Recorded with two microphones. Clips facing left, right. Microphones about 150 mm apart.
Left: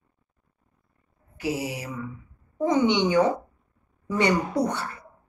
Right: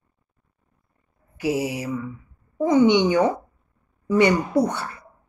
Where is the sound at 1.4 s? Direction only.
20° right (ahead or behind).